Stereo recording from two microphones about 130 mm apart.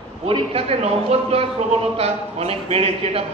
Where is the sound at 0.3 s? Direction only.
50° right (ahead or behind).